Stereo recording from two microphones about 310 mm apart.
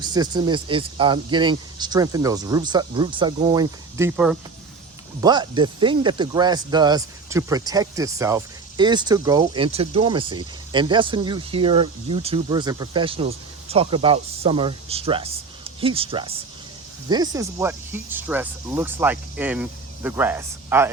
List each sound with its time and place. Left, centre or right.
0.0 s speech: centre